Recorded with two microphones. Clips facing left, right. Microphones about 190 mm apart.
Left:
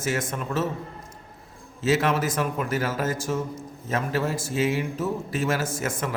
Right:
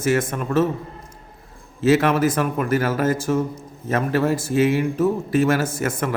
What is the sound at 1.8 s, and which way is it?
A man's voice, 55° right (ahead or behind).